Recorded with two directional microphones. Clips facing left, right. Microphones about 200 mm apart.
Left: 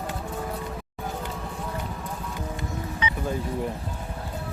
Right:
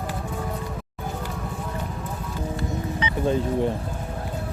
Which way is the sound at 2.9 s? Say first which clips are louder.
Right 6 dB; 30° right (ahead or behind).